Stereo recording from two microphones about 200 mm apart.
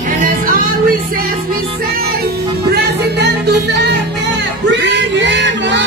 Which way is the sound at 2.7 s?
55° right (ahead or behind).